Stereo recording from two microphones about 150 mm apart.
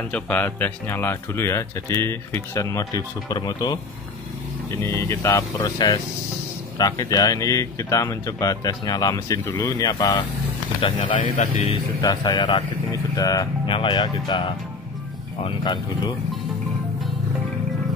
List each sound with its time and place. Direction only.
0.1 s speech: 10° left (ahead or behind); by 3.8 s 25° left (ahead or behind)
4.7 s speech: 15° left (ahead or behind)
10.8 s speech: 35° left (ahead or behind)